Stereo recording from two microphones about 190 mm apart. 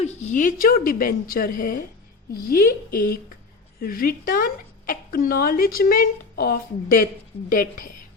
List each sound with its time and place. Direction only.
0.0 s a woman's voice: 40° left (ahead or behind)